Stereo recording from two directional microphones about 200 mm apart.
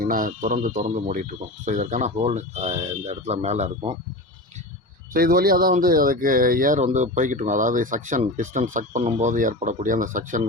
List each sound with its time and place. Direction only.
0.0 s speech: 45° right (ahead or behind)
5.1 s speech: 45° right (ahead or behind)